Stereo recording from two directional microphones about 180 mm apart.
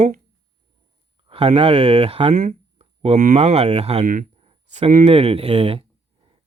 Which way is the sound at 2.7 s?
35° right (ahead or behind).